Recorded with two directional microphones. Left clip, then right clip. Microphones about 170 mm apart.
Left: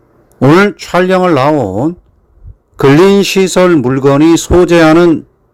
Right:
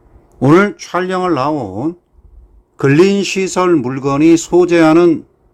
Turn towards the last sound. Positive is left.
turn(degrees=20)  # may be behind; listen again after turning